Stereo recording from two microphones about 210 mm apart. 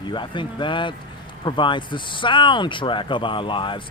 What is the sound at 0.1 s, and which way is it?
Speech, 20° left (ahead or behind).